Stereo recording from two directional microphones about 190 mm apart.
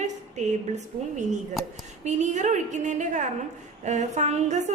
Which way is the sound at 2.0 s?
40° right (ahead or behind).